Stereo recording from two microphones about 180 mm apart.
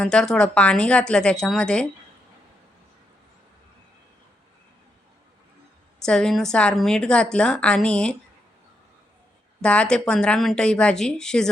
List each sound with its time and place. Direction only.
0.0 s a woman's voice: 5° left (ahead or behind)
6.1 s a woman's voice: 5° left (ahead or behind)
9.6 s a woman's voice: 5° left (ahead or behind)